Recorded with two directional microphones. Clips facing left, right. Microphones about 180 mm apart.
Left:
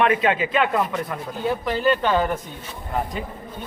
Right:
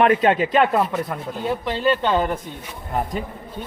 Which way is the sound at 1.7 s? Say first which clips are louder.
Right 1 dB; 25° right (ahead or behind).